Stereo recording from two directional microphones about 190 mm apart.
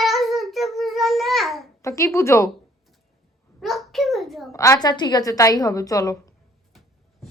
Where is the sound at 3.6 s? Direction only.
Centre (ahead or behind).